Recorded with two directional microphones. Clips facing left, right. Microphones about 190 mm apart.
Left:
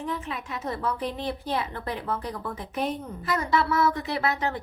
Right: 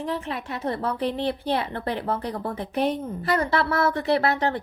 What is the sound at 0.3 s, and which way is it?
Speech, 70° right (ahead or behind).